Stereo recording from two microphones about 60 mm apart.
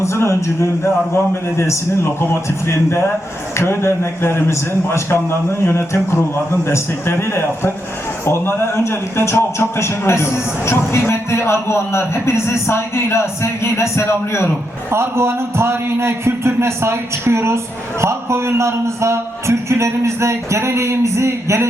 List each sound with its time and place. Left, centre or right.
0.0 s a man's voice: left
14.8 s a man's voice: right